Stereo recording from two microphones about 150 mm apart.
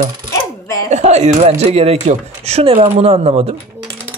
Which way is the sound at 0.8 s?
50° right (ahead or behind).